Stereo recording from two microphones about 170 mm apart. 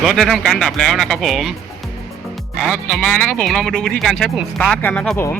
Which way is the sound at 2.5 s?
5° left (ahead or behind).